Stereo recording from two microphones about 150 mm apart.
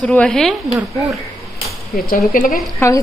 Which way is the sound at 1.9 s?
75° left (ahead or behind).